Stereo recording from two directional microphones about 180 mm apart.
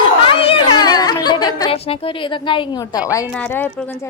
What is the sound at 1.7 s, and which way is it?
A woman's voice, 30° left (ahead or behind).